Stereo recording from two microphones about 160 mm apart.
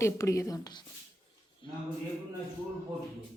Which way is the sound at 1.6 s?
30° left (ahead or behind).